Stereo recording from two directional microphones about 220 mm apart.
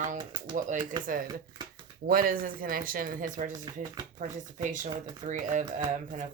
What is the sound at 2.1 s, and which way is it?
Speech, 40° right (ahead or behind).